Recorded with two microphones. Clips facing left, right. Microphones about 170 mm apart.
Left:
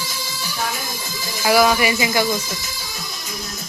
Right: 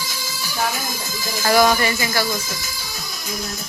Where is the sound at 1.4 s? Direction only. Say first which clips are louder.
Left 1 dB; 5° left (ahead or behind).